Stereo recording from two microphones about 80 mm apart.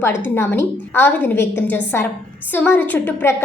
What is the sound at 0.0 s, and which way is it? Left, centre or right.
A woman's voice, left.